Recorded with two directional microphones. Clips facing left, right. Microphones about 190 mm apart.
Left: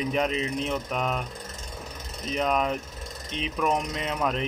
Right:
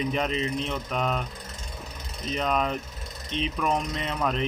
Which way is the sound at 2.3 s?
5° left (ahead or behind).